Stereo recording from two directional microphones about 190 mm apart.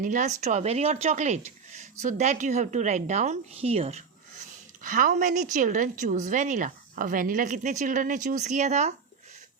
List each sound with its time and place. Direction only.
0.0 s a woman's voice: 40° right (ahead or behind)
4.8 s a woman's voice: 45° right (ahead or behind)